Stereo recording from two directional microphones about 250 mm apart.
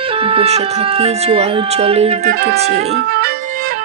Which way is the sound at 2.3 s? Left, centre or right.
Right.